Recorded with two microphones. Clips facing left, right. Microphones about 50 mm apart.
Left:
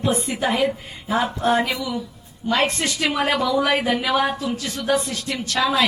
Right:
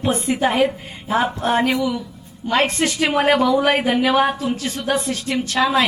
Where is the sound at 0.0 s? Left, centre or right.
Right.